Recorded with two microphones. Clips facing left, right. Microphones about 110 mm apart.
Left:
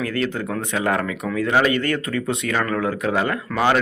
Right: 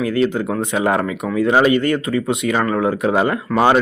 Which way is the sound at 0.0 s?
15° right (ahead or behind).